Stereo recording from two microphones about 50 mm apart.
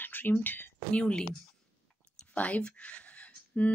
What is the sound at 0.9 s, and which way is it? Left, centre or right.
Speech, left.